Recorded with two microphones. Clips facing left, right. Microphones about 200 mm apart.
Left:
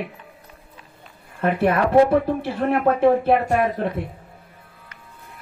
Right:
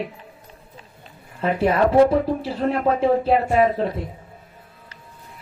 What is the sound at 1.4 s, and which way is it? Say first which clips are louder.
Speech: right 1 dB; 55° left (ahead or behind).